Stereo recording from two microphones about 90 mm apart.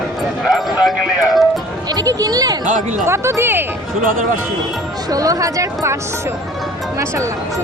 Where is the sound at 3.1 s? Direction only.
30° right (ahead or behind).